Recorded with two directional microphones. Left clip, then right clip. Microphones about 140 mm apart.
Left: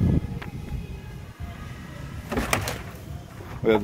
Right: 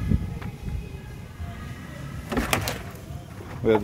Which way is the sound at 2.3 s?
15° left (ahead or behind).